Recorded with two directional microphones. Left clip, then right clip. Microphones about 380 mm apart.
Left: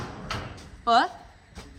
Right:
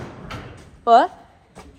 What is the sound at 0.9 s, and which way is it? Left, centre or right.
Speech, centre.